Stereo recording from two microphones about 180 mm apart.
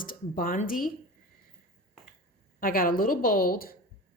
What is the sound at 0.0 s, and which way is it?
Speech, 50° left (ahead or behind).